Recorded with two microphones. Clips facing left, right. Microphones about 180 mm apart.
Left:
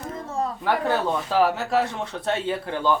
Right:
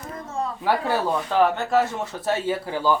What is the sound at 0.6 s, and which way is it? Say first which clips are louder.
Speech: right 1 dB; 10° right (ahead or behind).